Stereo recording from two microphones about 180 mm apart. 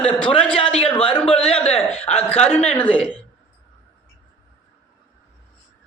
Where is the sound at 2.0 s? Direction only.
35° left (ahead or behind).